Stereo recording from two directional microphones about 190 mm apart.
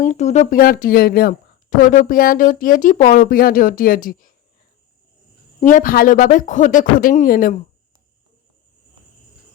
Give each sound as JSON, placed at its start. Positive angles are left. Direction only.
{"t": 0.0, "sound": "speech", "side_deg": 40}
{"t": 5.5, "sound": "speech", "side_deg": 40}